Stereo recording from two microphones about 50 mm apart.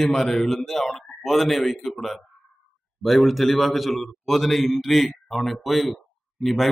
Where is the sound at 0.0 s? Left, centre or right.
Centre.